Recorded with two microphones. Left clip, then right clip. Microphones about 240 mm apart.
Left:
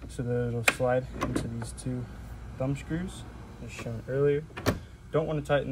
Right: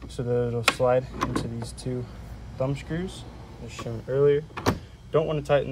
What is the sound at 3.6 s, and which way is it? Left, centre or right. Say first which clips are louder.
Speech: right 3 dB; centre.